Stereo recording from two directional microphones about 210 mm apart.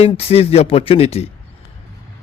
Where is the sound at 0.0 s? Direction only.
30° left (ahead or behind).